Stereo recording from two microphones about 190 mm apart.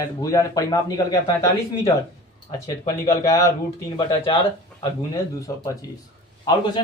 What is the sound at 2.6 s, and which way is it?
Speech, 20° left (ahead or behind).